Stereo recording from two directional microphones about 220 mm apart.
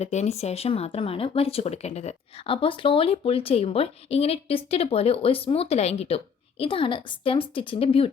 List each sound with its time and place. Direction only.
0.0 s speech: 30° left (ahead or behind)